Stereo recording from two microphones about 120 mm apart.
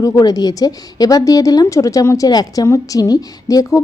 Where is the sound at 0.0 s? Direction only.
30° left (ahead or behind).